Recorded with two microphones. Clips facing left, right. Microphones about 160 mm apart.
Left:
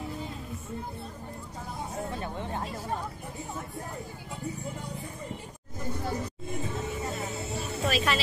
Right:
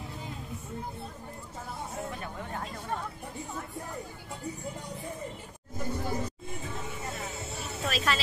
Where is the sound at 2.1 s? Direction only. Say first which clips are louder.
Left 4 dB; 25° left (ahead or behind).